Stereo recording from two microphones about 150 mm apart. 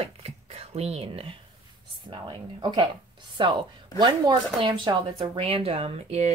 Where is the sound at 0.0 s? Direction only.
40° right (ahead or behind).